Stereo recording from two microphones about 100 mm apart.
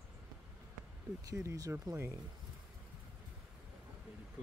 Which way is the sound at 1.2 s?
30° right (ahead or behind).